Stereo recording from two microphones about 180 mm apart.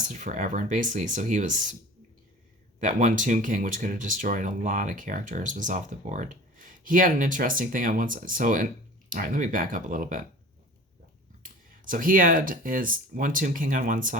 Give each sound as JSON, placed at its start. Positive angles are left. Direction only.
{"t": 0.1, "sound": "speech", "side_deg": -45}
{"t": 2.8, "sound": "speech", "side_deg": -45}
{"t": 11.4, "sound": "speech", "side_deg": -50}